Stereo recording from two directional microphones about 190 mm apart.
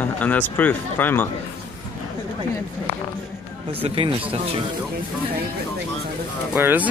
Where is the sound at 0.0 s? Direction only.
10° left (ahead or behind).